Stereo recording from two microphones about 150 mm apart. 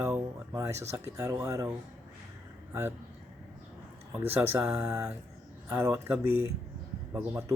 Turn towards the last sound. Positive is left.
turn(degrees=-15)  # may be behind; listen again after turning